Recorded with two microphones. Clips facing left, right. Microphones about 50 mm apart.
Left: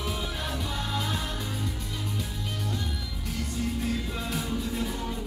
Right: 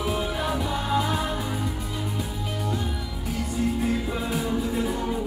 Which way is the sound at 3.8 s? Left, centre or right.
Centre.